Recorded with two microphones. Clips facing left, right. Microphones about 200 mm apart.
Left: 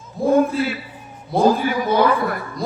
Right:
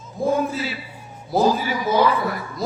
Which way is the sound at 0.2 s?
Centre (ahead or behind).